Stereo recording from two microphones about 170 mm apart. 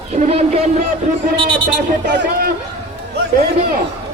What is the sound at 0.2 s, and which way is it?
Speech, 35° right (ahead or behind).